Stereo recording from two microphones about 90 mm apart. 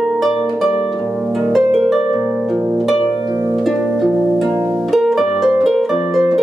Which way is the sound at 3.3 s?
30° right (ahead or behind).